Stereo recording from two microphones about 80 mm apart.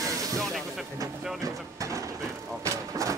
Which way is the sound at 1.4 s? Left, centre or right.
Right.